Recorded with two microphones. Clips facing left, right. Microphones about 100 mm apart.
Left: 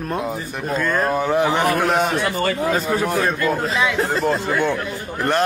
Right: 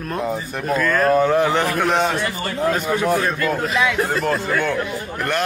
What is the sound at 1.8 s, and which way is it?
A man's voice, centre (ahead or behind).